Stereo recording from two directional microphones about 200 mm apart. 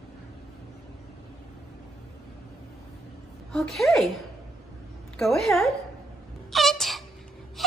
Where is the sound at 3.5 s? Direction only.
Centre (ahead or behind).